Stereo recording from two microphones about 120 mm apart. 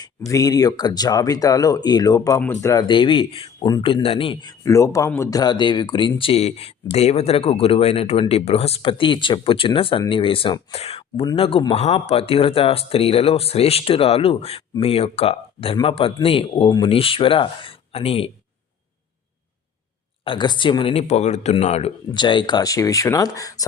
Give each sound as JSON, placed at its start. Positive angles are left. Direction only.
{"t": 0.3, "sound": "speech", "side_deg": 30}
{"t": 2.8, "sound": "speech", "side_deg": 45}
{"t": 4.6, "sound": "speech", "side_deg": 25}
{"t": 5.4, "sound": "speech", "side_deg": 35}
{"t": 20.2, "sound": "speech", "side_deg": 40}
{"t": 21.1, "sound": "speech", "side_deg": 70}
{"t": 22.1, "sound": "speech", "side_deg": 40}